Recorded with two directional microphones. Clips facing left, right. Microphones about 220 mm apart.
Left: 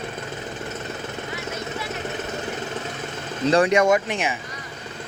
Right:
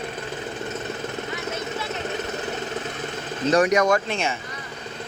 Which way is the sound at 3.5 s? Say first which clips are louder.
Left 1 dB; 30° left (ahead or behind).